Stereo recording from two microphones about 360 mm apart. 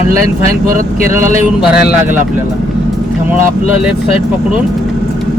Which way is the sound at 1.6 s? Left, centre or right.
Centre.